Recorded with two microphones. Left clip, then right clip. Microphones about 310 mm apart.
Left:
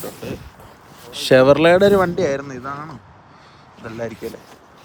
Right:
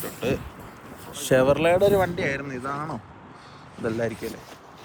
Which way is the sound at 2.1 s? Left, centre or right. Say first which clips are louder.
Left 7 dB; centre.